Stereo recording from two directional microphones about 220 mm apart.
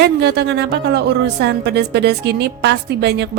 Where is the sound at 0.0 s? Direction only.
50° right (ahead or behind).